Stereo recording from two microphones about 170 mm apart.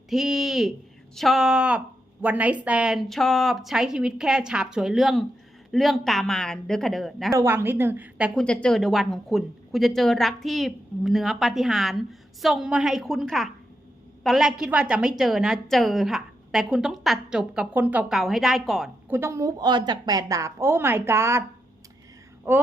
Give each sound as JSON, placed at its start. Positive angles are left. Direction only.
{"t": 0.1, "sound": "a sound", "side_deg": 0}
{"t": 1.1, "sound": "a woman's voice", "side_deg": 0}
{"t": 7.3, "sound": "a woman's voice", "side_deg": -15}
{"t": 8.4, "sound": "a woman's voice", "side_deg": 5}
{"t": 19.0, "sound": "a woman's voice", "side_deg": -15}
{"t": 22.5, "sound": "a woman's voice", "side_deg": -10}